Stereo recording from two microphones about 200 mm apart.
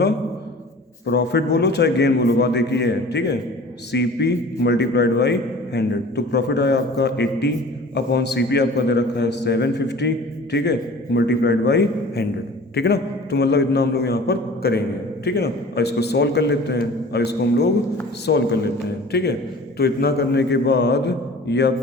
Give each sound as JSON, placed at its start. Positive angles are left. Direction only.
{"t": 1.0, "sound": "a man's voice", "side_deg": 55}